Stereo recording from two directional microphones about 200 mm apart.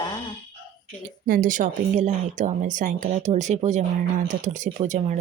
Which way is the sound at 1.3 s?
40° right (ahead or behind).